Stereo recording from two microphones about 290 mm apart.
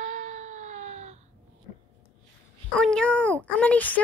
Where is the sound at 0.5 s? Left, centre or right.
Right.